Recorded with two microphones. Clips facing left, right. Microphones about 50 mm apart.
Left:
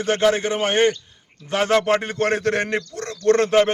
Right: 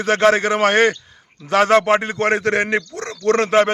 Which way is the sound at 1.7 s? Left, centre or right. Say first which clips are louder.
Right 4 dB; right.